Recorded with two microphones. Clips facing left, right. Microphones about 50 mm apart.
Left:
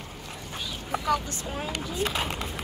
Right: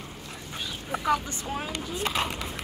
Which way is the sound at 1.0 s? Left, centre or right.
Centre.